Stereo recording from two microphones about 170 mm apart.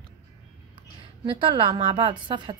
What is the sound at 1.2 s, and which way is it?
A woman's voice, 30° right (ahead or behind).